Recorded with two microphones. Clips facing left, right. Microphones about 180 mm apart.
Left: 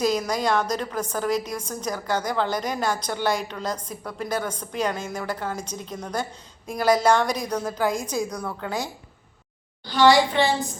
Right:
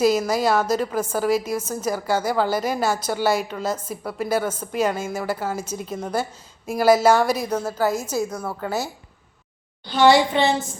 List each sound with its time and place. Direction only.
0.0 s a woman's voice: 5° right (ahead or behind)
9.8 s a woman's voice: 20° right (ahead or behind)